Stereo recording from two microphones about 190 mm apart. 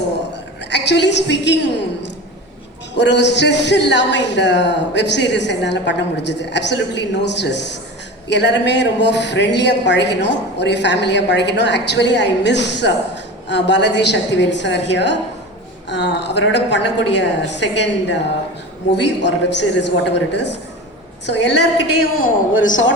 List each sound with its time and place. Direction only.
0.7 s a woman's voice: 65° left (ahead or behind)
19.2 s speech: 65° left (ahead or behind)
22.1 s a man's voice: 90° left